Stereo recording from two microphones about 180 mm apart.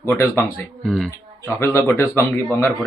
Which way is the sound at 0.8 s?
Centre (ahead or behind).